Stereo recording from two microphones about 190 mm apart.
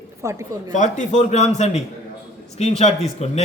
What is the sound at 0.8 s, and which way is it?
A man's voice, 40° left (ahead or behind).